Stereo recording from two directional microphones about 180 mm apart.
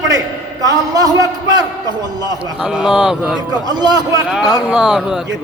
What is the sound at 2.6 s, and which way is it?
Speech, 5° right (ahead or behind).